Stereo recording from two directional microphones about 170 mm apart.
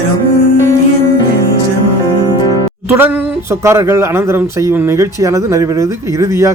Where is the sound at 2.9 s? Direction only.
10° right (ahead or behind).